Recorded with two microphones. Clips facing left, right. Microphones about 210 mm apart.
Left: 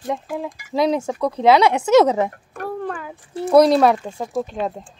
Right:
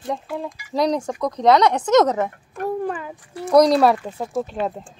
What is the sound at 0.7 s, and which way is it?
Speech, 5° left (ahead or behind).